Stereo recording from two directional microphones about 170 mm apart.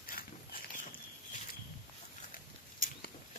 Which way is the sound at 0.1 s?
55° left (ahead or behind).